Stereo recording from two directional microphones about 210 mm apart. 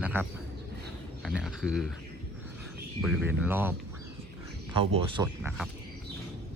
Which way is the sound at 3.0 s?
10° right (ahead or behind).